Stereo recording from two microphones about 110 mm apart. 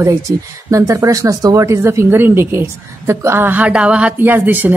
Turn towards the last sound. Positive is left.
turn(degrees=-15)  # may be behind; listen again after turning